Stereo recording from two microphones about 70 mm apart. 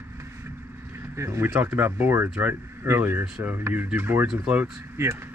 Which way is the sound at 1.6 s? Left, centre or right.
Right.